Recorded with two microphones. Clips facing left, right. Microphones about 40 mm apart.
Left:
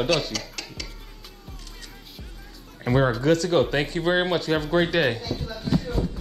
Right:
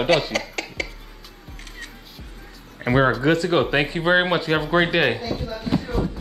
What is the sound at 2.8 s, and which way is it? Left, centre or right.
Speech, right.